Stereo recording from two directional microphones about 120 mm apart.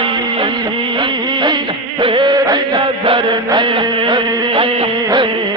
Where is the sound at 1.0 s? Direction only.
40° right (ahead or behind).